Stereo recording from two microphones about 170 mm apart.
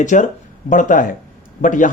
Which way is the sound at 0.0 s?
45° left (ahead or behind).